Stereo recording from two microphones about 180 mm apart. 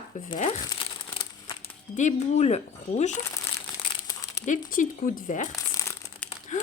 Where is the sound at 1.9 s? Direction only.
40° left (ahead or behind).